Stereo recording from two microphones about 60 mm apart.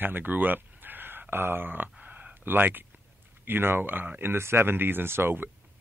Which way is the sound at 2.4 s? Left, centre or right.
Right.